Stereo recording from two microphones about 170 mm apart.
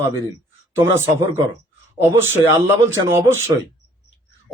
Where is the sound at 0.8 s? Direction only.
15° right (ahead or behind).